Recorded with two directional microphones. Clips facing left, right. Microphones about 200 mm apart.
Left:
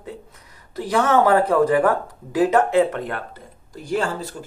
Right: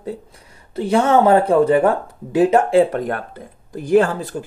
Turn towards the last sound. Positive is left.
turn(degrees=-55)  # may be behind; listen again after turning